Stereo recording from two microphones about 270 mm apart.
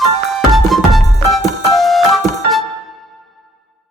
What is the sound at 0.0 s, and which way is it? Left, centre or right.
Music, centre.